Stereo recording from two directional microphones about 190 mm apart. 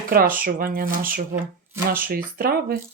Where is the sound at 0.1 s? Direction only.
50° right (ahead or behind).